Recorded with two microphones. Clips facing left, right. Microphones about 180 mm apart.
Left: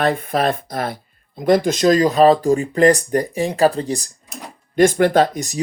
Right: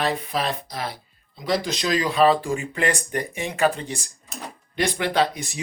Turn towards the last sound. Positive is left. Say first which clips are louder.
# left 6 dB
turn(degrees=45)  # may be behind; listen again after turning